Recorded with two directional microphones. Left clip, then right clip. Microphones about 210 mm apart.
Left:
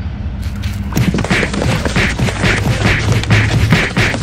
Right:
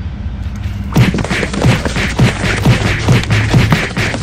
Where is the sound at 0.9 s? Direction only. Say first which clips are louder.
Right 1 dB; centre (ahead or behind).